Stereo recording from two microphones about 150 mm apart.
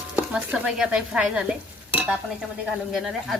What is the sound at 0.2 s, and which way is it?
Speech, 10° right (ahead or behind).